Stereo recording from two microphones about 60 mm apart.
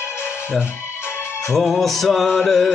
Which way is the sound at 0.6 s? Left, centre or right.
Left.